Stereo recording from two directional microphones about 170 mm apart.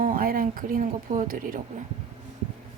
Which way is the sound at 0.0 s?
55° right (ahead or behind).